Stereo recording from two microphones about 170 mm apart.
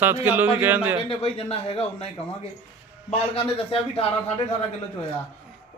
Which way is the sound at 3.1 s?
35° left (ahead or behind).